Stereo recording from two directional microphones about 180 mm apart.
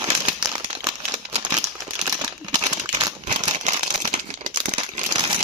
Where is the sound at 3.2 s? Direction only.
40° right (ahead or behind).